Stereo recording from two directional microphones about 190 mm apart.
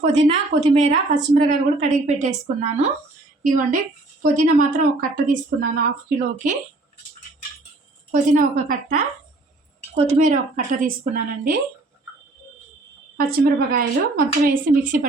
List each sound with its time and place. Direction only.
0.0 s a woman's voice: 30° right (ahead or behind)
8.1 s a woman's voice: 40° right (ahead or behind)
13.1 s a woman's voice: 50° right (ahead or behind)